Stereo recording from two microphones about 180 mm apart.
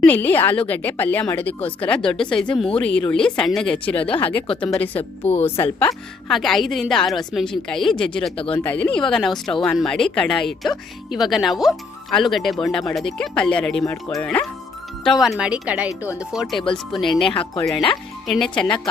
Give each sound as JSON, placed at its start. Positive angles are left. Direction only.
{"t": 0.0, "sound": "speech", "side_deg": 10}
{"t": 4.0, "sound": "speech", "side_deg": 30}
{"t": 4.8, "sound": "speech", "side_deg": 10}
{"t": 5.8, "sound": "speech", "side_deg": 0}